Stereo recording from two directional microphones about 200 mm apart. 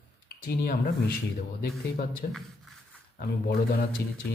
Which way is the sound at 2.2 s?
45° left (ahead or behind).